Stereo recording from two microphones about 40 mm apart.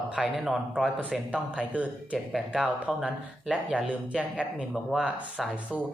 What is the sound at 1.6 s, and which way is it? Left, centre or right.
Speech, right.